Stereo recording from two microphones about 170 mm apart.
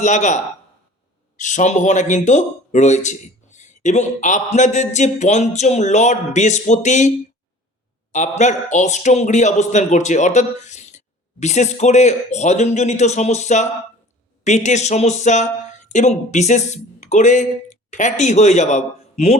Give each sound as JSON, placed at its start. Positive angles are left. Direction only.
{"t": 0.0, "sound": "speech", "side_deg": 45}
{"t": 1.4, "sound": "speech", "side_deg": 45}
{"t": 8.1, "sound": "speech", "side_deg": 45}